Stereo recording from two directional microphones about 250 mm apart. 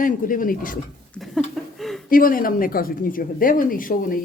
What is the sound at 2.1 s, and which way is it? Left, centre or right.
Speech, left.